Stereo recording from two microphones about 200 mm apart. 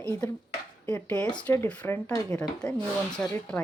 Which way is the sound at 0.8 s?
10° left (ahead or behind).